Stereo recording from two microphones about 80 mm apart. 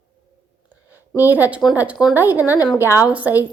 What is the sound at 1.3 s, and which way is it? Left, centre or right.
A woman's voice, centre.